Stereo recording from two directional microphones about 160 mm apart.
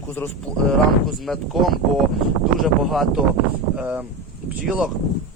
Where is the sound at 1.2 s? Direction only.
Centre (ahead or behind).